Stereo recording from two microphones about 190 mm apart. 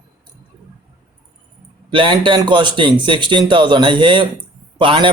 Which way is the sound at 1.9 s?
25° right (ahead or behind).